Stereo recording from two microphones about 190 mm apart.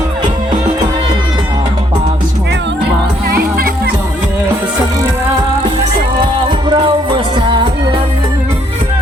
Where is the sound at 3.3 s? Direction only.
50° right (ahead or behind).